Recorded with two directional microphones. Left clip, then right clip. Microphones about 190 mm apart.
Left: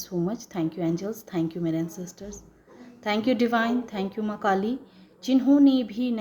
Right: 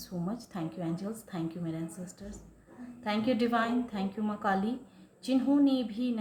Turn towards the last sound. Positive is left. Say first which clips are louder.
# left 6 dB
turn(degrees=40)  # may be behind; listen again after turning